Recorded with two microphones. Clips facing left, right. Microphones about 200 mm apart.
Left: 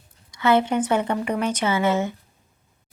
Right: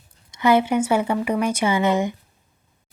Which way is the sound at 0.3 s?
15° right (ahead or behind).